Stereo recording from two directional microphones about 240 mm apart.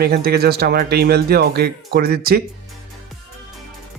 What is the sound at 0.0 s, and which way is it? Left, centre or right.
A man's voice, right.